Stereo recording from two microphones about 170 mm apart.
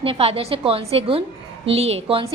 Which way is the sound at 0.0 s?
35° right (ahead or behind).